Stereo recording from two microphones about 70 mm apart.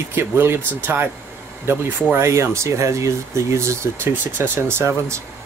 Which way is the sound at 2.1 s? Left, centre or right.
Right.